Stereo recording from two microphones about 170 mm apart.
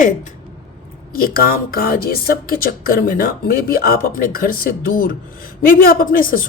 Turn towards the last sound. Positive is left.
turn(degrees=55)  # may be behind; listen again after turning